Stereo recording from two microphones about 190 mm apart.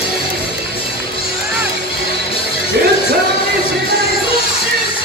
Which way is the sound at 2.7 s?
60° right (ahead or behind).